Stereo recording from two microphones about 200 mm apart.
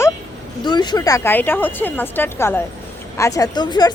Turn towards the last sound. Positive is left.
turn(degrees=20)  # may be behind; listen again after turning